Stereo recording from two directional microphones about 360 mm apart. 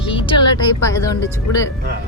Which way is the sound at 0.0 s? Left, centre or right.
Centre.